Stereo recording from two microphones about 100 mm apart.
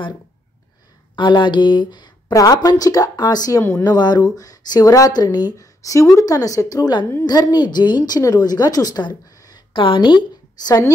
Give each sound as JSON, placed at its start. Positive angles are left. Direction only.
{"t": 1.1, "sound": "a woman's voice", "side_deg": 50}